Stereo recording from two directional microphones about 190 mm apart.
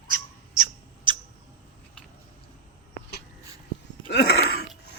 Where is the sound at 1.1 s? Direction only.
25° right (ahead or behind).